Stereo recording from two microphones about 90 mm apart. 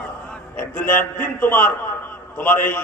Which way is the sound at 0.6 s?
20° left (ahead or behind).